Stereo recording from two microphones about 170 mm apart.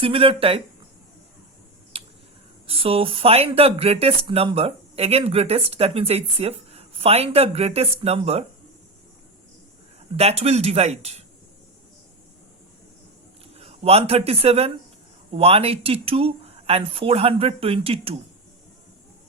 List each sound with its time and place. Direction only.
0.0 s speech: 30° right (ahead or behind)
1.9 s a sound: 35° right (ahead or behind)
2.6 s speech: 35° right (ahead or behind)
10.2 s speech: 40° right (ahead or behind)
13.6 s speech: 35° right (ahead or behind)